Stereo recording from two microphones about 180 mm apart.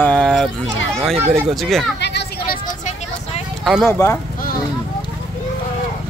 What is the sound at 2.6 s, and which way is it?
Vehicle, 40° left (ahead or behind).